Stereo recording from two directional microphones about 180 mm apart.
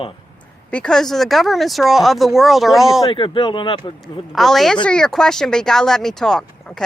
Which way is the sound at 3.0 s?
25° left (ahead or behind).